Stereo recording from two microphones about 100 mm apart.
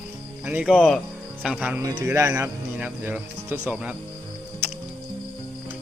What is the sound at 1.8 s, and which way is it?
Speech, 35° right (ahead or behind).